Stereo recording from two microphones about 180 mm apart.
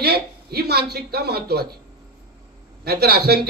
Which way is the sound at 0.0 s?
60° right (ahead or behind).